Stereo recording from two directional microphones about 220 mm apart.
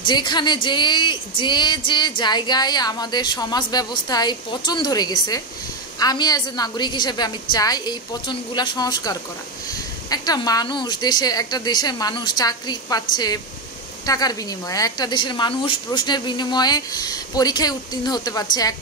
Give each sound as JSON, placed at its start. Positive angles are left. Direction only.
{"t": 0.0, "sound": "a woman's voice", "side_deg": 20}